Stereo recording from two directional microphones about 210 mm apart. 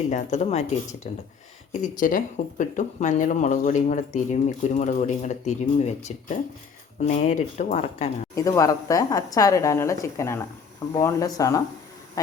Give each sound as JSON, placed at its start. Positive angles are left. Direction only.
{"t": 0.1, "sound": "speech", "side_deg": 35}
{"t": 8.4, "sound": "speech", "side_deg": 15}